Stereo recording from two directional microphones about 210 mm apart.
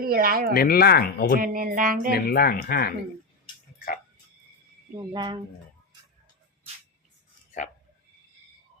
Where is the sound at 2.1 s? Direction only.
45° left (ahead or behind).